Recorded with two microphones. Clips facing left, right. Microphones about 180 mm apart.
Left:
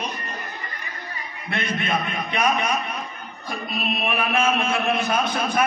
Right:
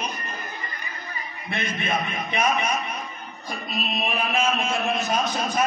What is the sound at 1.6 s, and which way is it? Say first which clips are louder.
Speech: left 2 dB; 60° left (ahead or behind).